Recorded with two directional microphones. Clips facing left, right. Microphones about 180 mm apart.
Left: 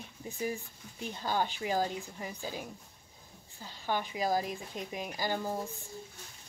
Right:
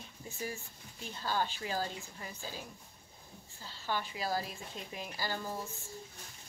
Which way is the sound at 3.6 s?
15° left (ahead or behind).